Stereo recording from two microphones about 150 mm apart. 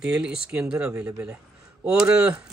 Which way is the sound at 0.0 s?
5° right (ahead or behind).